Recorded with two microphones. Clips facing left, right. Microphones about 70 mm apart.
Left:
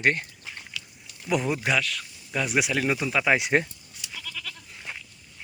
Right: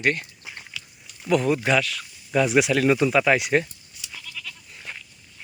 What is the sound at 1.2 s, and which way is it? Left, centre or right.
Speech, centre.